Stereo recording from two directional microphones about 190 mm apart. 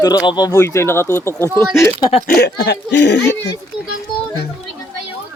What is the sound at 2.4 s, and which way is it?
Speech, 60° left (ahead or behind).